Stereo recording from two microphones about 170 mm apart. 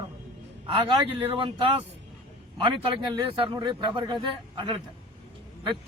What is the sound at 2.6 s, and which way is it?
Speech, 30° right (ahead or behind).